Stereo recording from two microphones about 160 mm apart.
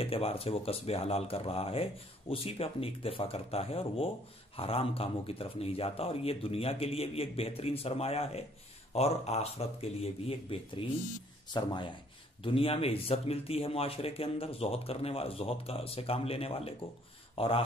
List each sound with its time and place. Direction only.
0.0 s speech: 35° left (ahead or behind)